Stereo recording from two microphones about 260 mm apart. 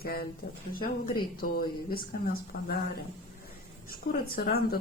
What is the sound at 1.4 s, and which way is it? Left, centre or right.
Speech, left.